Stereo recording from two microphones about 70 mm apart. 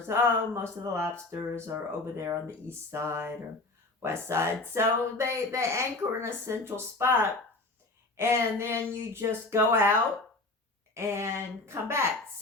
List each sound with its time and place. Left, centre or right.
0.1 s speech: right
10.9 s speech: right